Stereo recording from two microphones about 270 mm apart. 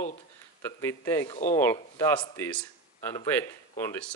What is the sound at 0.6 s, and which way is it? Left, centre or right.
Speech, centre.